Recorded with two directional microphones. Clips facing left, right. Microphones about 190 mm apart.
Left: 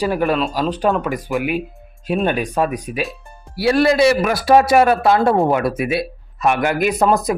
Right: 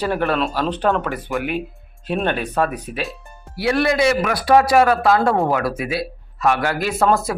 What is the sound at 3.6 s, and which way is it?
A man's voice, 30° left (ahead or behind).